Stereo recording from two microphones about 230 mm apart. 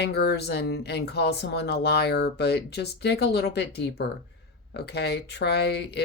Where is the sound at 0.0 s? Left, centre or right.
Left.